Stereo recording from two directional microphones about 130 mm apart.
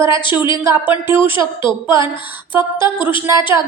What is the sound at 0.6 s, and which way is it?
Speech, 20° right (ahead or behind).